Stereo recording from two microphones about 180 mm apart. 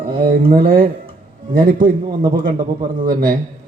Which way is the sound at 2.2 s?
25° right (ahead or behind).